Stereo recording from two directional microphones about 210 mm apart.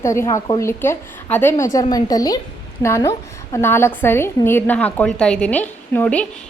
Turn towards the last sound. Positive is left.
turn(degrees=5)  # may be behind; listen again after turning